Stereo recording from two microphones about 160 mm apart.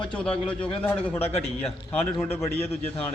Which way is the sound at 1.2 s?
40° left (ahead or behind).